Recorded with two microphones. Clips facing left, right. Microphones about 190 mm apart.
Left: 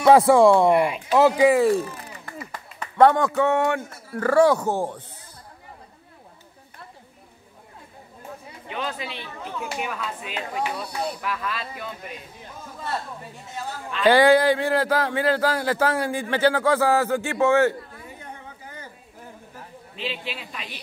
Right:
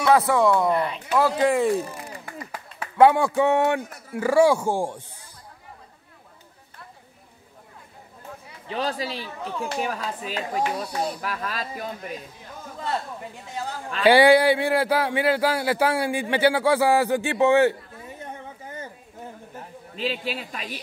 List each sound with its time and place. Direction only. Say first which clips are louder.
0.0 s speech: left 5 dB; 30° left (ahead or behind)
0.7 s a man's voice: left 4 dB; 10° left (ahead or behind); by 5.0 s 10° right (ahead or behind)
8.6 s speech: right 4 dB; 35° right (ahead or behind)
14.0 s speech: right 1 dB; 10° right (ahead or behind)
20.0 s speech: right 4 dB; 40° right (ahead or behind)